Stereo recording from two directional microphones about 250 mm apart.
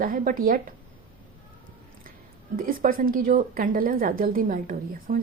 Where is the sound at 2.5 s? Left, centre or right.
Right.